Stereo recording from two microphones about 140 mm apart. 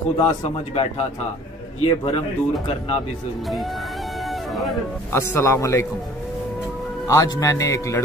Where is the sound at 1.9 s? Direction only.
45° left (ahead or behind).